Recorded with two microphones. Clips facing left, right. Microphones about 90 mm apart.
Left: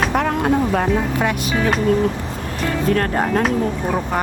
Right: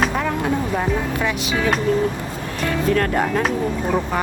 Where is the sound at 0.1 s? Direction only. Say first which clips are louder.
Left 4 dB; 55° left (ahead or behind).